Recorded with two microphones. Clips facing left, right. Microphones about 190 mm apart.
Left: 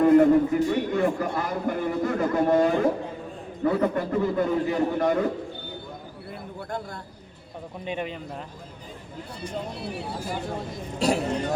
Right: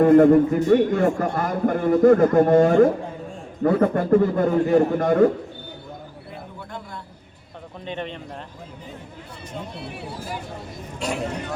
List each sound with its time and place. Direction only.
0.0 s a man's voice: 50° right (ahead or behind)
6.7 s a sound: 45° left (ahead or behind)
7.9 s speech: 10° left (ahead or behind)
11.0 s speech: 35° left (ahead or behind)